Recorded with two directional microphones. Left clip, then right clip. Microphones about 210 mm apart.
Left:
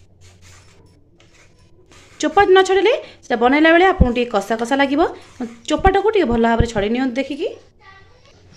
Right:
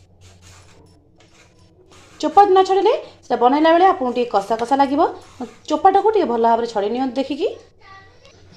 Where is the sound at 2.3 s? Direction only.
15° left (ahead or behind).